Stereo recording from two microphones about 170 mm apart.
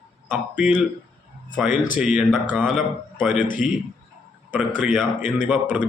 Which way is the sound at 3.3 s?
50° left (ahead or behind).